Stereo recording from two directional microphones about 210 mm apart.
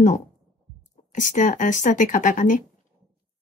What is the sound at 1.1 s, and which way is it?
Speech, 35° left (ahead or behind).